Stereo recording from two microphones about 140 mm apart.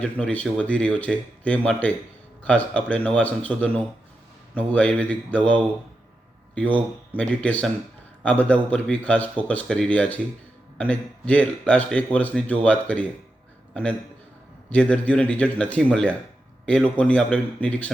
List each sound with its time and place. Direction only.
0.0 s a man's voice: 10° left (ahead or behind)
14.7 s speech: 10° left (ahead or behind)